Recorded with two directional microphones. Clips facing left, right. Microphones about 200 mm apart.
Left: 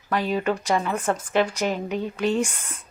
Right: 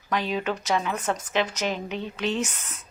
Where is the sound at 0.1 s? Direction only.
10° left (ahead or behind).